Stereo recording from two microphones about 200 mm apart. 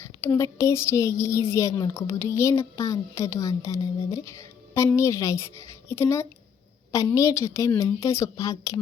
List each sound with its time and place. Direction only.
0.0 s speech: 10° left (ahead or behind)